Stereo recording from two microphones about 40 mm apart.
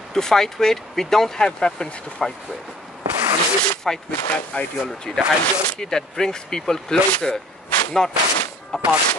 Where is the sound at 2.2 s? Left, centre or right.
Centre.